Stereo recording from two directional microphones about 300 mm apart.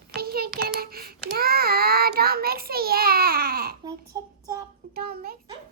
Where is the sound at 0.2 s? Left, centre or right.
Right.